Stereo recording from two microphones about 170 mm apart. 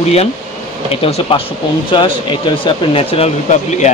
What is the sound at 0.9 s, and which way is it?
Speech, 35° left (ahead or behind).